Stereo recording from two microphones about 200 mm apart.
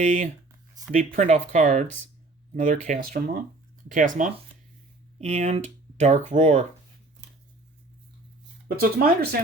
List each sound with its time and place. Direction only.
0.0 s speech: 40° right (ahead or behind)
8.6 s speech: 50° right (ahead or behind)